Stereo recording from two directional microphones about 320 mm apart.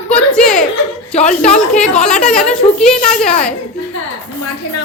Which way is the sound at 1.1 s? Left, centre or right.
Left.